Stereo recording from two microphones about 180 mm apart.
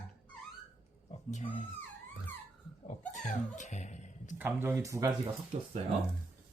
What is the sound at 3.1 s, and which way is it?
Speech, 40° left (ahead or behind).